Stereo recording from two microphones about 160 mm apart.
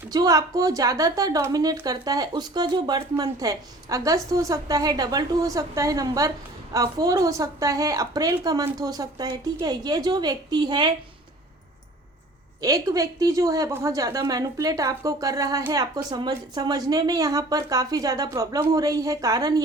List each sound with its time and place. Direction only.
0.1 s a woman's voice: 25° right (ahead or behind)
12.6 s a woman's voice: 20° right (ahead or behind)